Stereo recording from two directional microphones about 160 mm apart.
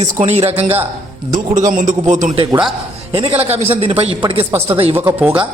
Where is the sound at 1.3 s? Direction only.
55° right (ahead or behind).